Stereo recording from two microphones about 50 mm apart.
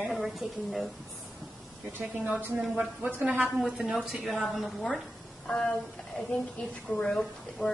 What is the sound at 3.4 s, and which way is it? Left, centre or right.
A woman's voice, centre.